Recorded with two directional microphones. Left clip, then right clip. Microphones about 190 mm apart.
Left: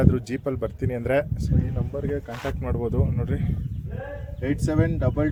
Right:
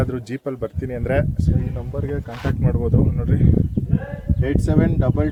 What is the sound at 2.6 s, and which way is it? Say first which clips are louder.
Speech: right 6 dB; 15° left (ahead or behind).